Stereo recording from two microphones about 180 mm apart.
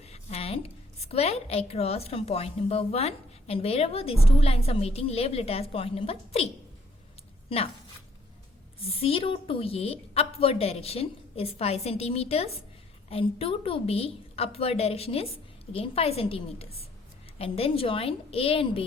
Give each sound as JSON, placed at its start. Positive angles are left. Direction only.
{"t": 0.0, "sound": "a woman's voice", "side_deg": 35}
{"t": 8.8, "sound": "a woman's voice", "side_deg": 30}